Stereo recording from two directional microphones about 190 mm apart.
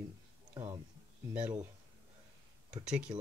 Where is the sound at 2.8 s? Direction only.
5° right (ahead or behind).